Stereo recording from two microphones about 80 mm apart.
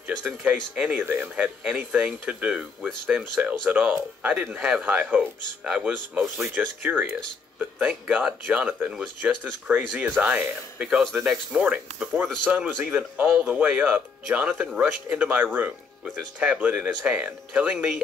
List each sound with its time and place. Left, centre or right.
0.2 s speech: centre
11.0 s speech: centre
11.6 s speech: right